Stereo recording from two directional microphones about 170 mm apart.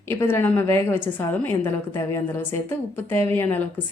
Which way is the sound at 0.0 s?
15° left (ahead or behind).